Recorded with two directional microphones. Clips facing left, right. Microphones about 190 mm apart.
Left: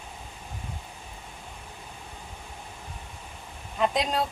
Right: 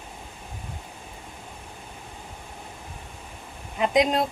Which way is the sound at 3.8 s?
15° right (ahead or behind).